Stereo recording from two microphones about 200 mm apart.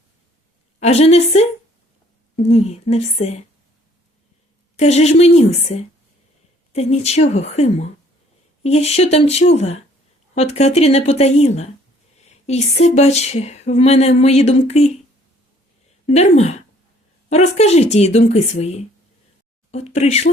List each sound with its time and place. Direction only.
0.8 s a woman's voice: 30° left (ahead or behind)
4.8 s speech: 35° left (ahead or behind)
16.0 s speech: 30° left (ahead or behind)